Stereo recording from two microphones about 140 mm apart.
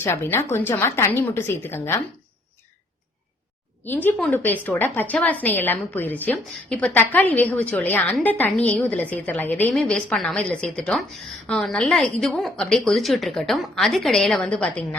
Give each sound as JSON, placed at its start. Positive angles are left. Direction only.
{"t": 0.0, "sound": "a woman's voice", "side_deg": 15}
{"t": 3.8, "sound": "a woman's voice", "side_deg": 15}